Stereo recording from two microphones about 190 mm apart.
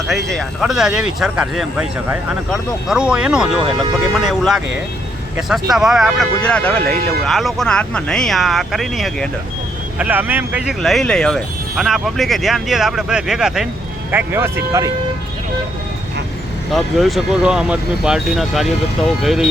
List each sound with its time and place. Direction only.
0.3 s speech: centre (ahead or behind)
10.0 s speech: 10° right (ahead or behind)
16.7 s speech: centre (ahead or behind)